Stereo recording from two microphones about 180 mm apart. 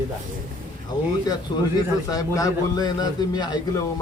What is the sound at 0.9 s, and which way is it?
Speech, 20° left (ahead or behind).